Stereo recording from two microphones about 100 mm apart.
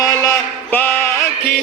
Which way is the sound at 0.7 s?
20° left (ahead or behind).